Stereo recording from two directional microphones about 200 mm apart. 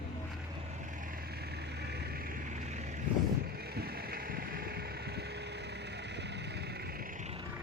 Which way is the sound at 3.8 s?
50° right (ahead or behind).